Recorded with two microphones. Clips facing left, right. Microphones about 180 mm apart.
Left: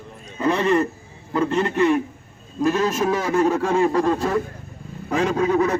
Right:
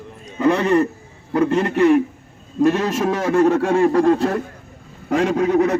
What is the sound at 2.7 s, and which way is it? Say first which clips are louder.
Speech: right 1 dB; 65° right (ahead or behind).